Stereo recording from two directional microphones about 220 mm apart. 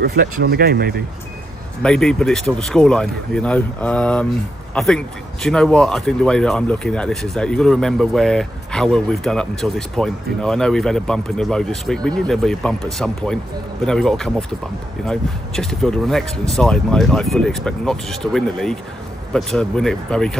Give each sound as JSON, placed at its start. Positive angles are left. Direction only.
{"t": 0.0, "sound": "speech", "side_deg": -45}
{"t": 1.8, "sound": "speech", "side_deg": 5}